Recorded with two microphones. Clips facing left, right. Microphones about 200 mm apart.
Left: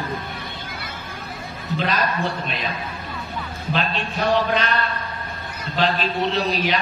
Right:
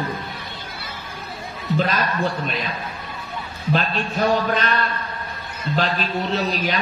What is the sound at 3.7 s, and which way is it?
A man's voice, 45° right (ahead or behind).